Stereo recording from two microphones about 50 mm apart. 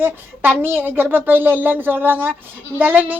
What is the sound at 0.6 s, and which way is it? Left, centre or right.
A woman's voice, right.